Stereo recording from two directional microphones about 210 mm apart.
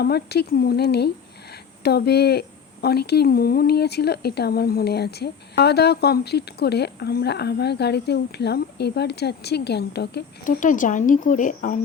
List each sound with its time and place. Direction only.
0.0 s speech: 50° left (ahead or behind)